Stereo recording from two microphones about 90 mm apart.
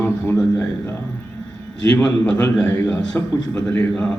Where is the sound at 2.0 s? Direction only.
10° left (ahead or behind).